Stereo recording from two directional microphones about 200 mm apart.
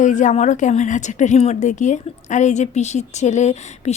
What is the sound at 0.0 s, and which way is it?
A woman's voice, 40° left (ahead or behind).